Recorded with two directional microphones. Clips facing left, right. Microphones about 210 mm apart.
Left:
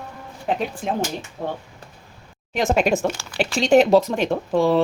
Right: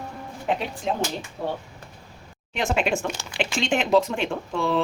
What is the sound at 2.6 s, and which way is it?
A woman's voice, 40° left (ahead or behind).